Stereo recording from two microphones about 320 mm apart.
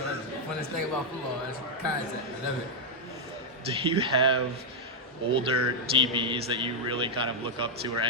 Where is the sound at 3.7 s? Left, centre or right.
Centre.